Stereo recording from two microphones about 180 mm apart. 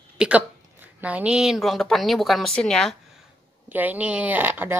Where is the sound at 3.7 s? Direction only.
10° right (ahead or behind).